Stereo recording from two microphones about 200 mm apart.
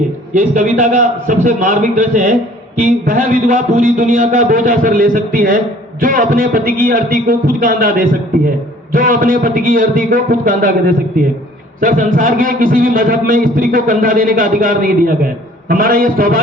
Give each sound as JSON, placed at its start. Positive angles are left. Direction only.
{"t": 0.3, "sound": "a man's voice", "side_deg": -40}